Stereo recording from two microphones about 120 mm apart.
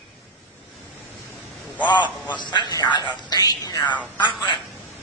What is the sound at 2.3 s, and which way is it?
A man's voice, 40° left (ahead or behind).